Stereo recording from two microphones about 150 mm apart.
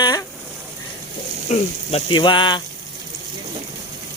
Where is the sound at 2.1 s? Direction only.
30° left (ahead or behind).